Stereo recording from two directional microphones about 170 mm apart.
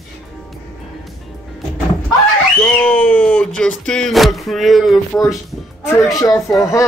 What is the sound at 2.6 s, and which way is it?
Speech, 10° left (ahead or behind).